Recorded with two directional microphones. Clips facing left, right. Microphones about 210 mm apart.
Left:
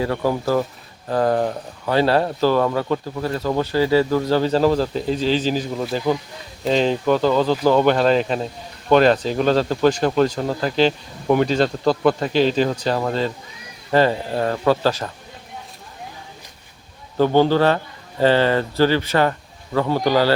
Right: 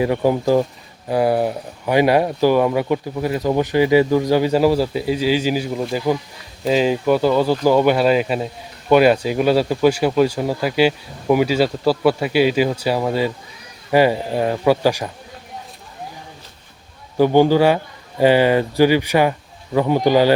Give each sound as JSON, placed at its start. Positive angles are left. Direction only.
{"t": 0.0, "sound": "speech", "side_deg": -15}
{"t": 17.2, "sound": "speech", "side_deg": -10}